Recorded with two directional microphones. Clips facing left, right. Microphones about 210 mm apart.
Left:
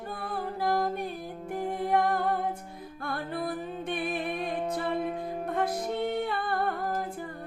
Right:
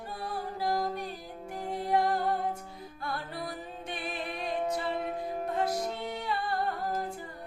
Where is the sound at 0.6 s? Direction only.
55° left (ahead or behind).